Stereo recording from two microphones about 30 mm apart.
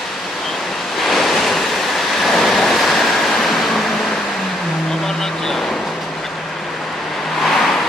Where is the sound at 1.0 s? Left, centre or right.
Centre.